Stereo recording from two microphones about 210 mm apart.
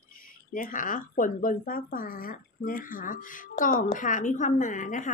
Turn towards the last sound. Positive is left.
turn(degrees=35)  # may be behind; listen again after turning